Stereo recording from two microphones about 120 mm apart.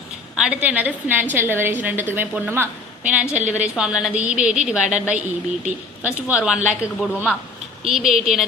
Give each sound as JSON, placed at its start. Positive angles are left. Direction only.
{"t": 0.3, "sound": "a woman's voice", "side_deg": -10}